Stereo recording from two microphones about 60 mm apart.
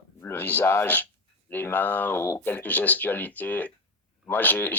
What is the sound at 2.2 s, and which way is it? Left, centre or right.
Speech, left.